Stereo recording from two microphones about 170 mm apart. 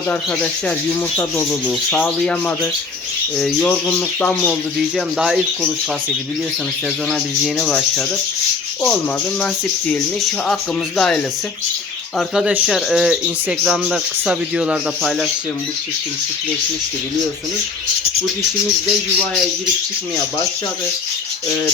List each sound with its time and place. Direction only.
1.1 s speech: 5° left (ahead or behind)
3.3 s speech: centre (ahead or behind)
4.9 s speech: 5° right (ahead or behind)
7.1 s speech: centre (ahead or behind)
9.4 s speech: 10° left (ahead or behind)